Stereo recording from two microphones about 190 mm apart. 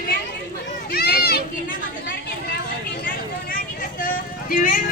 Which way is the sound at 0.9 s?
55° left (ahead or behind).